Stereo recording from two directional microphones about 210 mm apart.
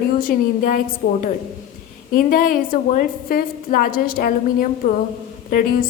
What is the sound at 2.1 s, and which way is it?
A woman's voice, 40° left (ahead or behind).